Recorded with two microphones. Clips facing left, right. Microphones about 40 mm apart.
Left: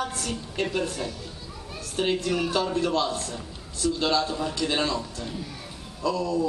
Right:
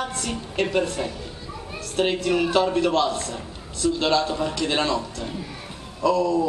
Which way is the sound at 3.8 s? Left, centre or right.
Centre.